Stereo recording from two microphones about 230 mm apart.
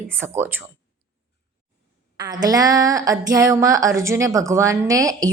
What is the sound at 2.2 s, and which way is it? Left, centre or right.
Speech, centre.